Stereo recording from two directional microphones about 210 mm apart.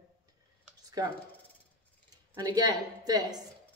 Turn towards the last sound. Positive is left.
turn(degrees=-20)  # may be behind; listen again after turning